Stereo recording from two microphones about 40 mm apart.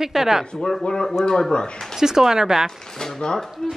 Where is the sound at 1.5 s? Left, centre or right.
Left.